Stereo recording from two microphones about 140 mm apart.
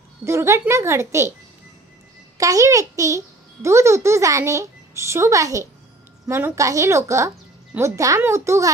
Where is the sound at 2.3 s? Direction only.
25° right (ahead or behind).